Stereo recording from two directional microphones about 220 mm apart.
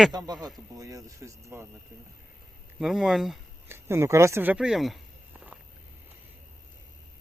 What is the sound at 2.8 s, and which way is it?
Speech, centre (ahead or behind).